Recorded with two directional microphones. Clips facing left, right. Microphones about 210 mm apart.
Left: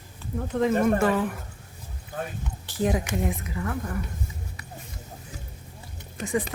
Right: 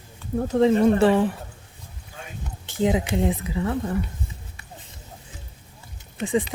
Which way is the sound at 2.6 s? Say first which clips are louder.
Right 4 dB; 20° right (ahead or behind).